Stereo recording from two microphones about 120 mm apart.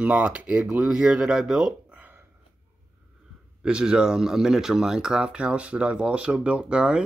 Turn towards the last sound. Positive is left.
turn(degrees=-10)  # may be behind; listen again after turning